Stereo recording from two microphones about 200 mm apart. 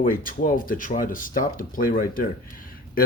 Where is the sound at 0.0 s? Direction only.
45° left (ahead or behind).